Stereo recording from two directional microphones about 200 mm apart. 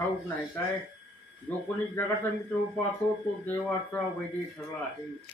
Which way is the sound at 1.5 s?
10° left (ahead or behind).